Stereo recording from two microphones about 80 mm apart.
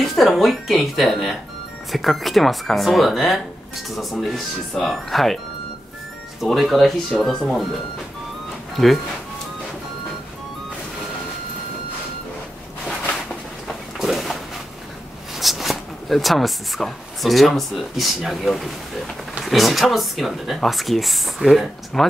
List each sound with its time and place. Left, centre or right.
0.0 s a sound: centre
1.9 s speech: centre
6.4 s speech: centre
8.7 s speech: centre
13.9 s a sound: centre
15.3 s speech: centre